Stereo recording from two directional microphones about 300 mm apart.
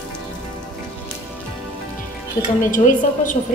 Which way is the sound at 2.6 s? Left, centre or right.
Left.